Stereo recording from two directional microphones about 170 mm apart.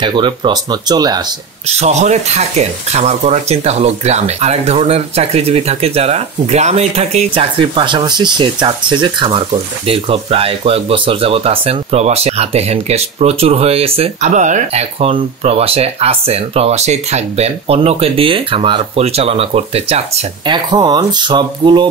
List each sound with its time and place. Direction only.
0.0 s speech: 30° right (ahead or behind)
1.7 s speech: 40° right (ahead or behind)